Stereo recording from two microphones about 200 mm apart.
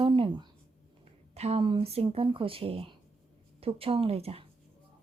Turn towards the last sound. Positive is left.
turn(degrees=-30)  # may be behind; listen again after turning